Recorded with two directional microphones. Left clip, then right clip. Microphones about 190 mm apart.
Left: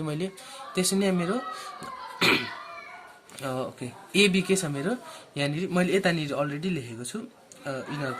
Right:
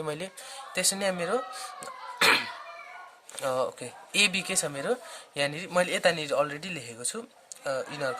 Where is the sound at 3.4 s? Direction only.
55° right (ahead or behind).